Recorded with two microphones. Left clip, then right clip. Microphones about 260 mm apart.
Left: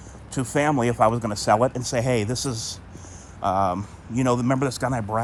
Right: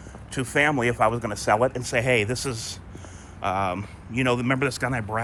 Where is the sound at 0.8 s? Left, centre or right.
Left.